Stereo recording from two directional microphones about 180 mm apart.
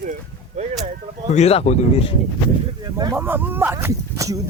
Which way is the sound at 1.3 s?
35° left (ahead or behind).